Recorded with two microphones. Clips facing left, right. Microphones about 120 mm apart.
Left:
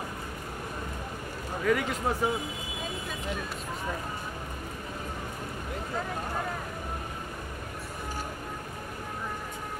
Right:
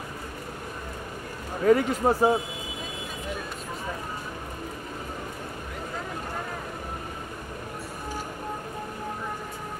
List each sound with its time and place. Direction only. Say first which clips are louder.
1.6 s speech: right 7 dB; 35° right (ahead or behind)